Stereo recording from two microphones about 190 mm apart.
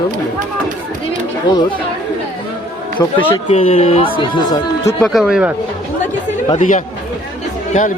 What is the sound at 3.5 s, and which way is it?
Speech, 30° left (ahead or behind).